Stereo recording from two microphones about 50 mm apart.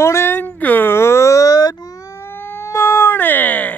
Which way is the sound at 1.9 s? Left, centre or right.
Left.